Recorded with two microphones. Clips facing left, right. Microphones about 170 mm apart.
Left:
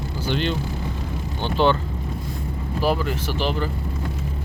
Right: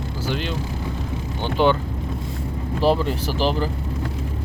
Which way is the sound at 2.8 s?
30° right (ahead or behind).